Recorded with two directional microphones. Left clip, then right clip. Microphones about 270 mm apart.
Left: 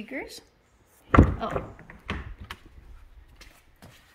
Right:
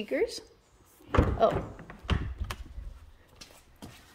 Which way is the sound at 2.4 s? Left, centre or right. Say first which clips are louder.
Even; right.